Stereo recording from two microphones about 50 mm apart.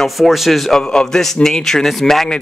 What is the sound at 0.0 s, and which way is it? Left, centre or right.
Speech, centre.